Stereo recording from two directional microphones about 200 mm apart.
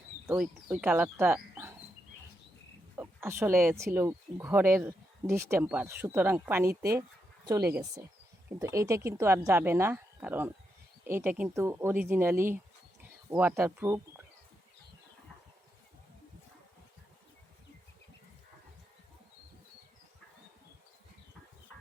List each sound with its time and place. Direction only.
0.3 s speech: 5° right (ahead or behind)
2.9 s speech: 10° right (ahead or behind)